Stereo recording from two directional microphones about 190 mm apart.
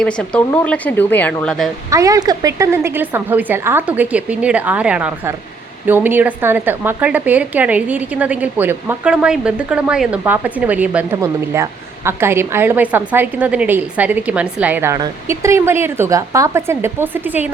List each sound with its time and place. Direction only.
0.0 s speech: 5° left (ahead or behind)
1.9 s a woman's voice: 15° right (ahead or behind)